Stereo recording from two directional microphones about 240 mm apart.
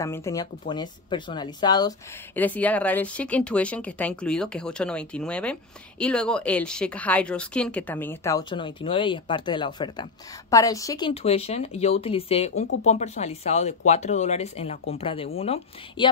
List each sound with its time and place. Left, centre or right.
0.0 s speech: centre
2.3 s speech: centre; by 16.1 s left